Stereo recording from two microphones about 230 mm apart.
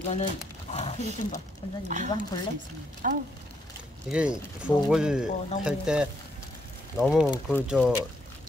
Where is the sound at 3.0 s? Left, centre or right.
Right.